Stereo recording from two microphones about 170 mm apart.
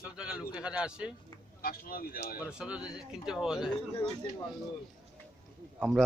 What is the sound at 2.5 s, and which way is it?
Speech, 5° right (ahead or behind).